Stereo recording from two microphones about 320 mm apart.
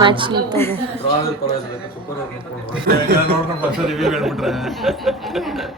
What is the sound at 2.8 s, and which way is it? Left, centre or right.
Speech, right.